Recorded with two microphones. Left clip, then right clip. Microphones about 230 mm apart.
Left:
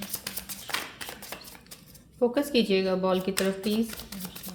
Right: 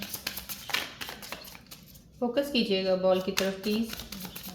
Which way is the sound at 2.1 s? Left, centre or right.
Left.